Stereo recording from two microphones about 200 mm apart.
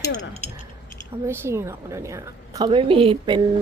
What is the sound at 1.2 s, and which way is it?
A woman's voice, 10° right (ahead or behind).